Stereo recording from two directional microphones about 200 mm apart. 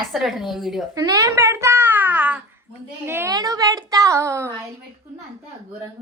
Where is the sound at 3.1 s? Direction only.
15° right (ahead or behind).